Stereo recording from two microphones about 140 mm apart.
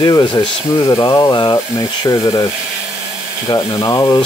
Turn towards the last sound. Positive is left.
turn(degrees=30)  # may be behind; listen again after turning